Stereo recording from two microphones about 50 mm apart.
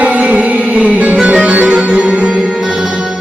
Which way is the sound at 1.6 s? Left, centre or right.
Centre.